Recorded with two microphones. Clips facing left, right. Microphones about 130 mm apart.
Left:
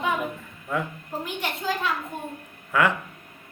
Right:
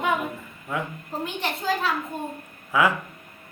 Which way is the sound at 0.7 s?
Centre (ahead or behind).